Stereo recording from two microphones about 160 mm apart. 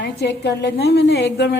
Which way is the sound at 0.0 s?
90° left.